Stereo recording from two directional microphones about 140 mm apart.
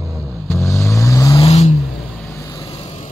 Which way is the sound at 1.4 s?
50° left (ahead or behind).